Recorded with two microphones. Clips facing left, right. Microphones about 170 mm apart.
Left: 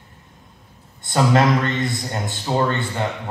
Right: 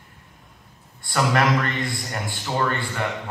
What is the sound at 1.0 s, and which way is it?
A man's voice, 20° left (ahead or behind).